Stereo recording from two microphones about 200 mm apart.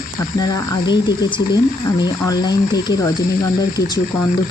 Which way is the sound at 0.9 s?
20° left (ahead or behind).